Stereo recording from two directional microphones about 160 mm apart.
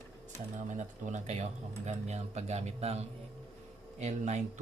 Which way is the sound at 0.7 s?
50° right (ahead or behind).